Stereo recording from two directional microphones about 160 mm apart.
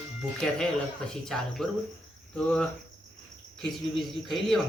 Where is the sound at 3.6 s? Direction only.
Centre (ahead or behind).